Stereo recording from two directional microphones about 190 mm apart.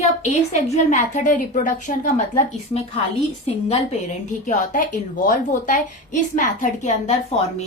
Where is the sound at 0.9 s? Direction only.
40° left (ahead or behind).